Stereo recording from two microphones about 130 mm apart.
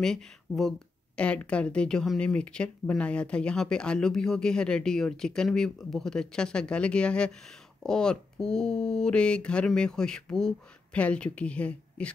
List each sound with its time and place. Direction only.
0.0 s speech: 5° left (ahead or behind)